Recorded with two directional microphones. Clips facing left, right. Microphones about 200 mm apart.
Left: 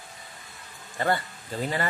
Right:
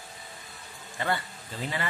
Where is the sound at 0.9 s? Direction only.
40° left (ahead or behind).